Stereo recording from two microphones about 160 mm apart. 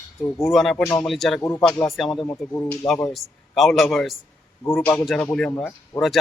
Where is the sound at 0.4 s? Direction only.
Centre (ahead or behind).